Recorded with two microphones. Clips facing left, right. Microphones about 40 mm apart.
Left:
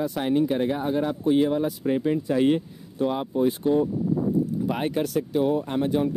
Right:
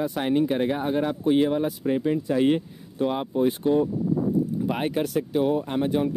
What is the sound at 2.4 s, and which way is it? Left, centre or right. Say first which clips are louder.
Speech: even; right.